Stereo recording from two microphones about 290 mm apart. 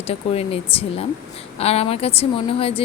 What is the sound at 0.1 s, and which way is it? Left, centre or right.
A woman's voice, left.